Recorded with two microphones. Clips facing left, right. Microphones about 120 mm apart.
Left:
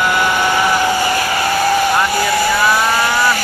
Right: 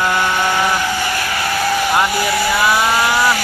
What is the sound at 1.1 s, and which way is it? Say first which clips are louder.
Vehicle: left 4 dB; 10° left (ahead or behind).